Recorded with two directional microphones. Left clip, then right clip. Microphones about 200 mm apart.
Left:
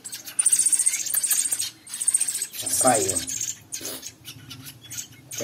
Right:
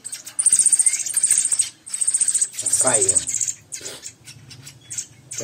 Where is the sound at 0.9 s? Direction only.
15° right (ahead or behind).